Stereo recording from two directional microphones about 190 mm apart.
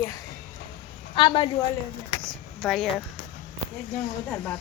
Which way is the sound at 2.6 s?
Centre (ahead or behind).